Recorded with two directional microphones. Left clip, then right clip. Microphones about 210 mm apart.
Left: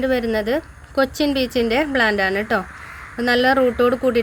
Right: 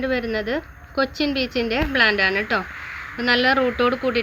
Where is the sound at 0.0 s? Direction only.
45° left (ahead or behind).